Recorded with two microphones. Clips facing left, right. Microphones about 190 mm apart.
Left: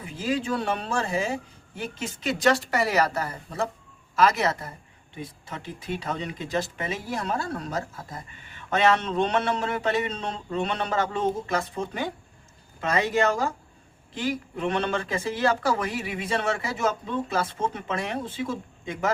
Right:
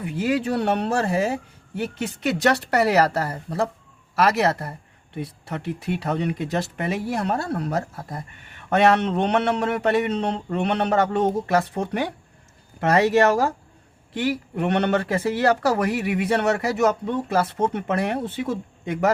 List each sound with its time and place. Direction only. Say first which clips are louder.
0.0 s speech: right 5 dB; 65° right (ahead or behind)